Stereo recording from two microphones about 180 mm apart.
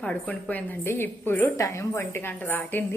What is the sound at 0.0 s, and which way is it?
A woman's voice, 5° left (ahead or behind).